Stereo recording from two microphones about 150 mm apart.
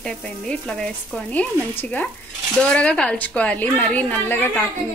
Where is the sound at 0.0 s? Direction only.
5° left (ahead or behind).